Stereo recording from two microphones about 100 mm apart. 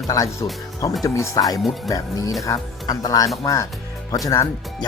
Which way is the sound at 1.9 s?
35° left (ahead or behind).